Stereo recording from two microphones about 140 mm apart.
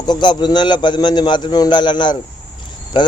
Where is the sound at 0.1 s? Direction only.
35° left (ahead or behind).